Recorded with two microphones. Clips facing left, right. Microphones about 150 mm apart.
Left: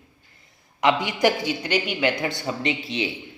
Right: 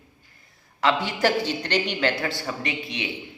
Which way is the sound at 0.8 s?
15° left (ahead or behind).